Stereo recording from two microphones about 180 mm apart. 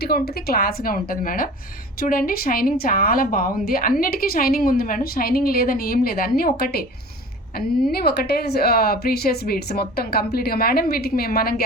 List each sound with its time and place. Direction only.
0.0 s a woman's voice: 60° left (ahead or behind)